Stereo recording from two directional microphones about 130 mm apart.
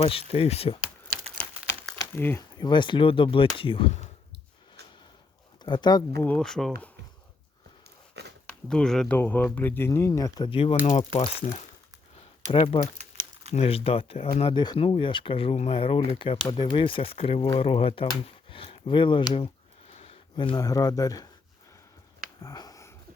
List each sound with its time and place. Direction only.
0.0 s speech: 45° left (ahead or behind)
2.1 s speech: 15° left (ahead or behind)
2.6 s speech: 35° left (ahead or behind)
5.6 s speech: 35° left (ahead or behind)
6.2 s speech: 5° left (ahead or behind)
8.4 s speech: 5° left (ahead or behind); by 10.8 s 45° left (ahead or behind)
10.8 s speech: 60° left (ahead or behind)
12.5 s speech: 45° left (ahead or behind)
13.0 s crumpling: 60° right (ahead or behind)
13.5 s speech: 50° left (ahead or behind)
19.9 s a sound: 50° left (ahead or behind)
20.3 s speech: 40° left (ahead or behind)
20.6 s speech: 30° left (ahead or behind)
22.4 s a sound: 25° left (ahead or behind)